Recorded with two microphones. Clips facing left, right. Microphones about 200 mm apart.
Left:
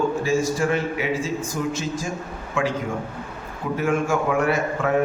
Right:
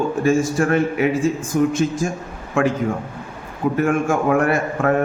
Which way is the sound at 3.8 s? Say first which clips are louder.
Right 2 dB; 50° right (ahead or behind).